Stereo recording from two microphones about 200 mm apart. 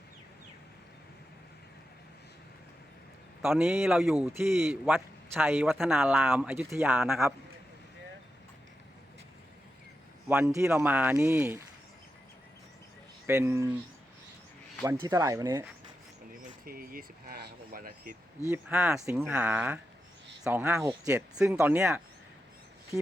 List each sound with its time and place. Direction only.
3.6 s a man's voice: 5° right (ahead or behind)
10.2 s speech: 10° right (ahead or behind)
13.2 s speech: 10° right (ahead or behind)
15.0 s speech: 15° right (ahead or behind)
16.6 s a sound: 45° right (ahead or behind)
18.4 s a man's voice: 10° right (ahead or behind)